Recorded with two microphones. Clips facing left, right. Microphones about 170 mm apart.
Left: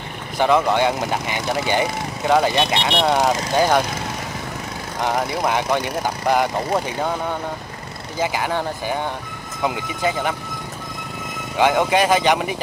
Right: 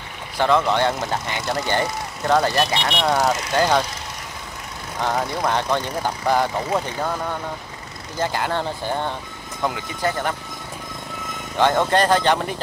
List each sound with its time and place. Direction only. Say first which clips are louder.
0.4 s speech: left 2 dB; 15° left (ahead or behind)
2.5 s speech: left 2 dB; centre (ahead or behind)
3.1 s speech: even; 15° left (ahead or behind)
5.0 s speech: left 1 dB; 10° left (ahead or behind)
11.5 s speech: left 1 dB; 10° left (ahead or behind)